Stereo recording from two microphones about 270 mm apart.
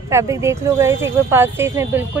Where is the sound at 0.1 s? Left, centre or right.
Centre.